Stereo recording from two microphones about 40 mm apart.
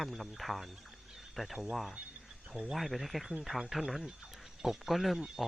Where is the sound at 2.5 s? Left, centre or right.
Centre.